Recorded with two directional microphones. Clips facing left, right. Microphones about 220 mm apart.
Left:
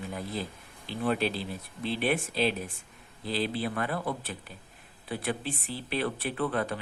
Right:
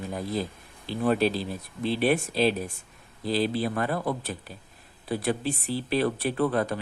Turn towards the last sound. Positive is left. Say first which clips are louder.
# right 5 dB
turn(degrees=-40)  # may be behind; listen again after turning